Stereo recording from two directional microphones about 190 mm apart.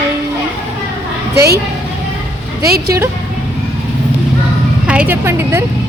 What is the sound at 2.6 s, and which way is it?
Speech, 55° right (ahead or behind).